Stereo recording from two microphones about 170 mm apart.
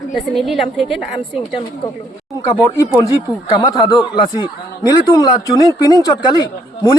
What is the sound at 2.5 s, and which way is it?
Speech, 20° left (ahead or behind).